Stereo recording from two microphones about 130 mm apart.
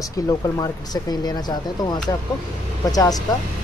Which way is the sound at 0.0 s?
25° left (ahead or behind).